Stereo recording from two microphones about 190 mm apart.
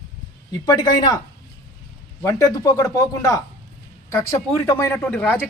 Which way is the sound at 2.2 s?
20° left (ahead or behind).